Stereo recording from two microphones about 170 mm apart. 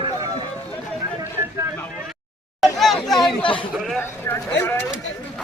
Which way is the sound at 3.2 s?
30° left (ahead or behind).